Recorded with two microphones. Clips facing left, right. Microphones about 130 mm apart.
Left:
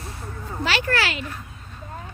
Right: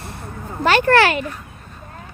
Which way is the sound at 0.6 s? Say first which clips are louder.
Right 10 dB; 50° right (ahead or behind).